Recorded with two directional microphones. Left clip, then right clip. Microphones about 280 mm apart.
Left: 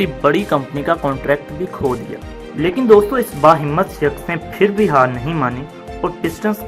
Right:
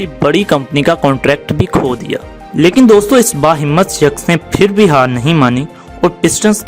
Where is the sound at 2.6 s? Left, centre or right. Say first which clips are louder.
Right 4 dB; right.